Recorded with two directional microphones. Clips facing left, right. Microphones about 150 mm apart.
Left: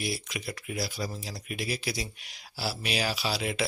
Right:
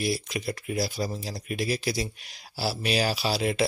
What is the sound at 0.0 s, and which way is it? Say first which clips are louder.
Speech: right 6 dB; 35° right (ahead or behind).